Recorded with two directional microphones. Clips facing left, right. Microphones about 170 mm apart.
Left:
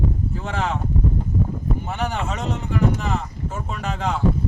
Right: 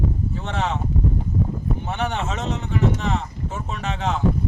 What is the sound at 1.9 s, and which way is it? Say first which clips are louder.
Speech: right 2 dB; centre (ahead or behind).